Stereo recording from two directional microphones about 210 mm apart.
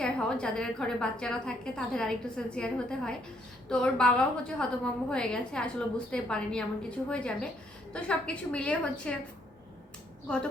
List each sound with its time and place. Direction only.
0.0 s a woman's voice: 5° left (ahead or behind)
10.2 s a woman's voice: 5° left (ahead or behind)